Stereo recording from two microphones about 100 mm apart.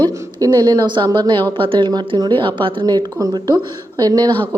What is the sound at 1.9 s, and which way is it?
A woman's voice, 45° right (ahead or behind).